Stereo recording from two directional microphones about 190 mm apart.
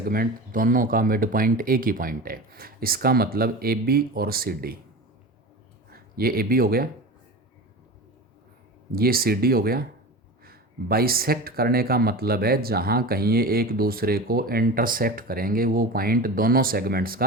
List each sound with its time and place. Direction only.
0.0 s speech: 50° right (ahead or behind)
5.9 s speech: 50° right (ahead or behind)
8.9 s speech: 50° right (ahead or behind)